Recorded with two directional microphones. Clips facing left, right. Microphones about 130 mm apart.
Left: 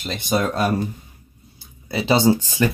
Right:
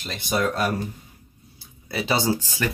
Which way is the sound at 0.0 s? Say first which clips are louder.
Left 3 dB; 25° left (ahead or behind).